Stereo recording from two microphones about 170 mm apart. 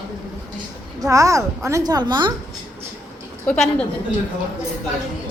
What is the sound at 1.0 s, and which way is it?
A woman's voice, 20° right (ahead or behind).